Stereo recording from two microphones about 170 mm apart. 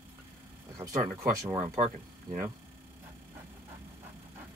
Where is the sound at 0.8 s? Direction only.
15° right (ahead or behind).